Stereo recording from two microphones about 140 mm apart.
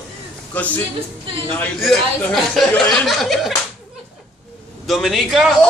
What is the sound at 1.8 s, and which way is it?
A man's voice, centre (ahead or behind).